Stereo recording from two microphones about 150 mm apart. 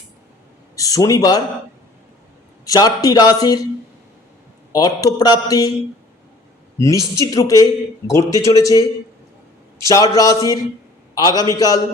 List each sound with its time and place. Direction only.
0.8 s a man's voice: 25° left (ahead or behind)
2.6 s speech: 25° left (ahead or behind)
4.7 s speech: 25° left (ahead or behind)
6.7 s speech: 20° left (ahead or behind)
9.8 s a man's voice: 20° left (ahead or behind)